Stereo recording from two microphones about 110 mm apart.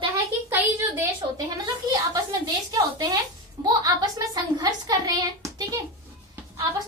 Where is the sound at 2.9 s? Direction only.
40° right (ahead or behind).